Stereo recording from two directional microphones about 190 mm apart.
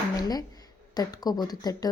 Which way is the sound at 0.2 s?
20° left (ahead or behind).